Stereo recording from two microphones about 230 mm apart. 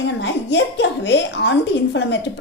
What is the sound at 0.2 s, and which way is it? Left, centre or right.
A woman's voice, left.